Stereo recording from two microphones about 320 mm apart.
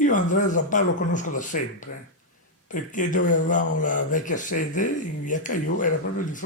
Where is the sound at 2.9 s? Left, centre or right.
Left.